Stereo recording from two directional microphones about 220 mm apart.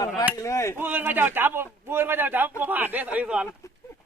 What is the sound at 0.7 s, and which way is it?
A man's voice, 10° right (ahead or behind).